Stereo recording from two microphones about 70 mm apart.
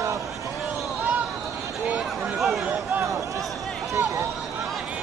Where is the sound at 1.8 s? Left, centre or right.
Centre.